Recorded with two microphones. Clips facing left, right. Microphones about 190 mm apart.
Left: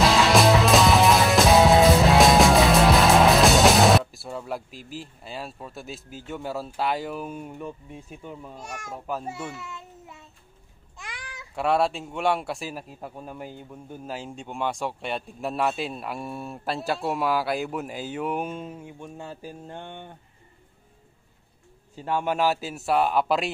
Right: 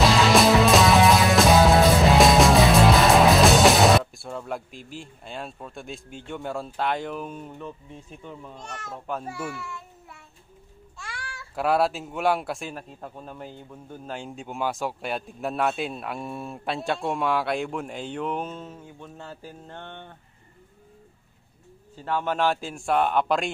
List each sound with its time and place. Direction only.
0.3 s music: centre (ahead or behind)
9.5 s a sound: 20° left (ahead or behind)
11.0 s babbling: 20° left (ahead or behind)
11.5 s a man's voice: centre (ahead or behind); by 20.2 s 15° left (ahead or behind)
21.9 s a man's voice: 15° left (ahead or behind)